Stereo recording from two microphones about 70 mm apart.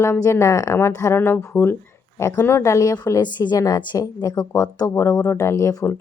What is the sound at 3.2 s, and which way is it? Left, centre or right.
A woman's voice, left.